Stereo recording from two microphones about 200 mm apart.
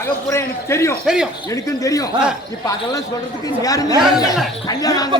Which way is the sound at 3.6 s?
15° left (ahead or behind).